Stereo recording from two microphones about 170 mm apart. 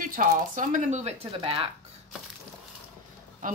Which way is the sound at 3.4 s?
50° right (ahead or behind).